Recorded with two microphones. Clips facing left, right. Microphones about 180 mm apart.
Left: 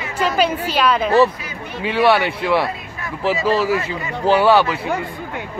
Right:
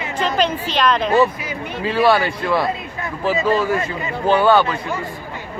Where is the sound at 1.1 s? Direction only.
15° right (ahead or behind).